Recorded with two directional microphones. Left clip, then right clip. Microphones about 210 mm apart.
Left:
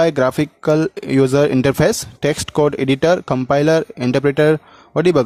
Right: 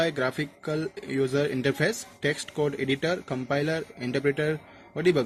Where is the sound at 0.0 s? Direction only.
45° left (ahead or behind).